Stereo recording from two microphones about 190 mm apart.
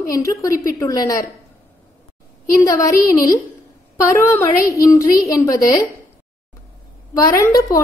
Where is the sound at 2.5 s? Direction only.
15° left (ahead or behind).